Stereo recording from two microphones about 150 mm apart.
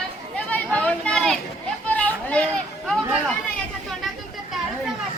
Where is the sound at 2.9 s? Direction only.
Centre (ahead or behind).